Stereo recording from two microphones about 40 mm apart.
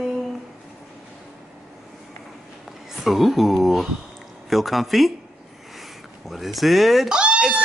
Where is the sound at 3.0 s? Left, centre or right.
Centre.